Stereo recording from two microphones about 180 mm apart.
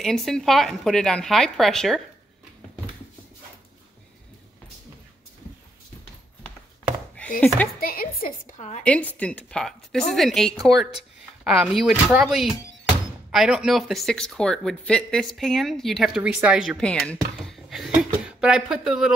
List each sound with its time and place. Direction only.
0.0 s speech: centre (ahead or behind)
7.2 s speech: 5° left (ahead or behind)
7.8 s speech: 55° left (ahead or behind)
8.5 s a woman's voice: 40° left (ahead or behind)
9.2 s speech: 5° left (ahead or behind)